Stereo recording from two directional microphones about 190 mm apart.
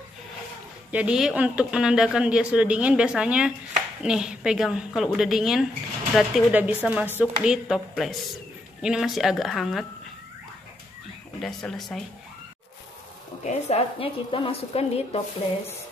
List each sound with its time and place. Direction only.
0.9 s speech: 5° right (ahead or behind)
11.4 s speech: centre (ahead or behind)
13.4 s a woman's voice: 35° left (ahead or behind)